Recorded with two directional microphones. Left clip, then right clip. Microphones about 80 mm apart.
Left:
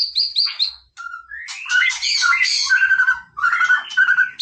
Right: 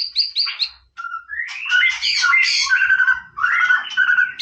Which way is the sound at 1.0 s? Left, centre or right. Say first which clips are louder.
Right 5 dB; centre.